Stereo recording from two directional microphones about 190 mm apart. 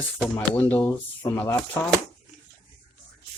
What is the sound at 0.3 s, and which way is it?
Speech, 10° left (ahead or behind).